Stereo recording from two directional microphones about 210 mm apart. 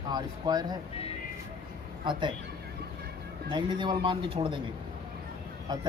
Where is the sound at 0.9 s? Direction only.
25° left (ahead or behind).